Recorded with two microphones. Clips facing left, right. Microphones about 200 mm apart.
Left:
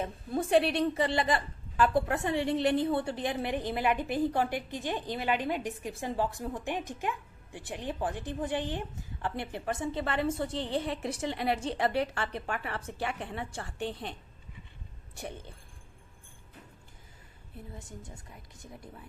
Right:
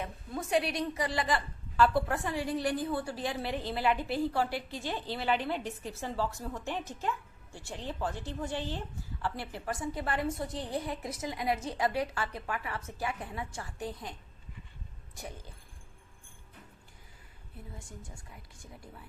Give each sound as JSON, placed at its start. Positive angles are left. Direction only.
{"t": 0.0, "sound": "a woman's voice", "side_deg": 30}
{"t": 15.1, "sound": "speech", "side_deg": 30}
{"t": 17.7, "sound": "speech", "side_deg": 20}